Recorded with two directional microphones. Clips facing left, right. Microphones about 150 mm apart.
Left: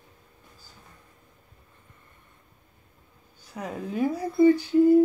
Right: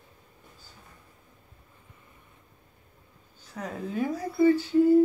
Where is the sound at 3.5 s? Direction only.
10° left (ahead or behind).